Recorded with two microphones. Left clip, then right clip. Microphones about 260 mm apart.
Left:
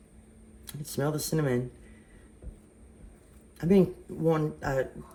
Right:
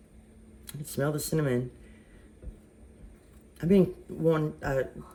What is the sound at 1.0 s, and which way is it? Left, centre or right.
Speech, left.